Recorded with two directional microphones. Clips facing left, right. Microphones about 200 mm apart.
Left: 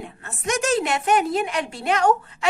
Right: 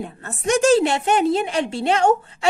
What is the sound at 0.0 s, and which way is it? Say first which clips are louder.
A woman's voice: right 5 dB; 35° right (ahead or behind).